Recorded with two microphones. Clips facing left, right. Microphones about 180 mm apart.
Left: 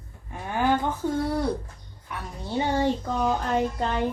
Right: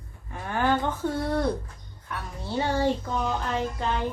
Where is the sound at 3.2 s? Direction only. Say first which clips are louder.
Left 6 dB; 45° left (ahead or behind).